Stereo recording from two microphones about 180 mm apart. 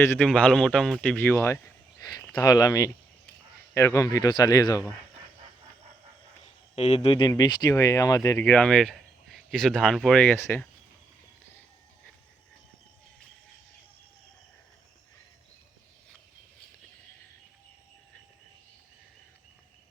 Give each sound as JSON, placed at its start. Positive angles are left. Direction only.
{"t": 0.0, "sound": "a man's voice", "side_deg": 15}
{"t": 6.7, "sound": "speech", "side_deg": 35}